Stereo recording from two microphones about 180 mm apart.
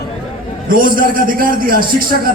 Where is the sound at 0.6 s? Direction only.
50° right (ahead or behind).